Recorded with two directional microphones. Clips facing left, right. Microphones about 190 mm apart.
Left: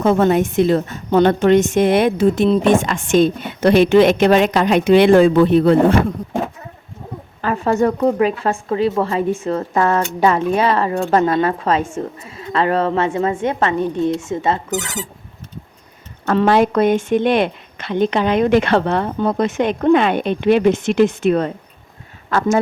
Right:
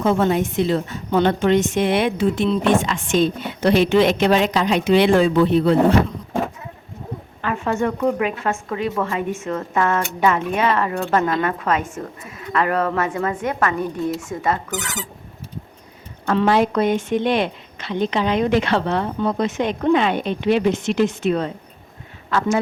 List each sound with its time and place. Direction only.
0.0 s a woman's voice: 55° left (ahead or behind)
7.4 s a woman's voice: 35° left (ahead or behind)
16.2 s a woman's voice: 45° left (ahead or behind)